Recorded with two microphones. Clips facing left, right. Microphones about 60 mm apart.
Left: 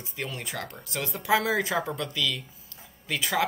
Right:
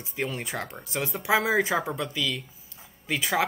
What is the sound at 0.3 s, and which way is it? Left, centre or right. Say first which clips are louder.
Speech: right 2 dB; right.